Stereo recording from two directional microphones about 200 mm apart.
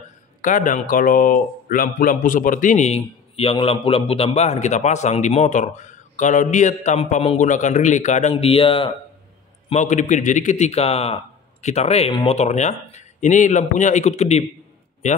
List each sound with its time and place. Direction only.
0.4 s speech: 40° left (ahead or behind)
9.7 s speech: 35° left (ahead or behind)